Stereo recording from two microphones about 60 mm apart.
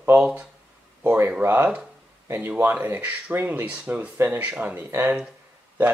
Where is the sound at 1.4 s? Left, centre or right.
Right.